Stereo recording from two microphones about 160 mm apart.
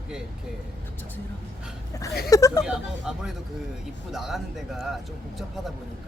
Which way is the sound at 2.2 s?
20° left (ahead or behind).